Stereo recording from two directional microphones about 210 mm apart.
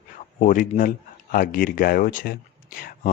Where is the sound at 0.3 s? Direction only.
40° left (ahead or behind).